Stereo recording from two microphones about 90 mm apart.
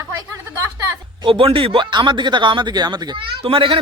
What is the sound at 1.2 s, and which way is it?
Speech, 85° right.